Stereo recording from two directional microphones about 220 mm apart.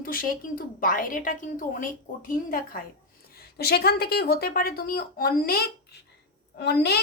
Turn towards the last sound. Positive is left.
turn(degrees=50)  # may be behind; listen again after turning